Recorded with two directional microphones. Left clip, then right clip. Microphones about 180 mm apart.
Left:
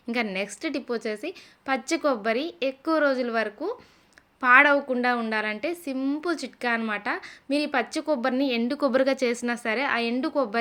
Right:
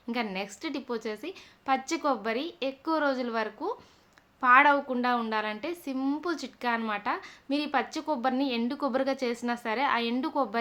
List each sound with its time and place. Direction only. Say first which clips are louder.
0.1 s a woman's voice: left 5 dB; 20° left (ahead or behind)